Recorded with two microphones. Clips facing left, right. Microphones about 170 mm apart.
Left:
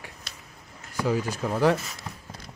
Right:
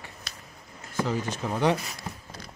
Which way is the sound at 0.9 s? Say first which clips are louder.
Left 2 dB; 10° left (ahead or behind).